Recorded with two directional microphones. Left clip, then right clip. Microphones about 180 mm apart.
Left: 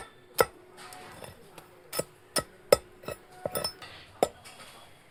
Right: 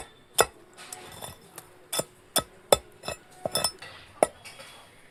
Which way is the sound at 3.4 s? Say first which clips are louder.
Right 4 dB; 20° right (ahead or behind).